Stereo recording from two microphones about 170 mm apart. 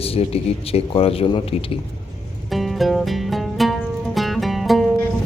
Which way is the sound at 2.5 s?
Centre (ahead or behind).